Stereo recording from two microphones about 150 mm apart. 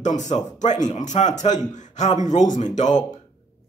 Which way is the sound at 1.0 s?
55° left (ahead or behind).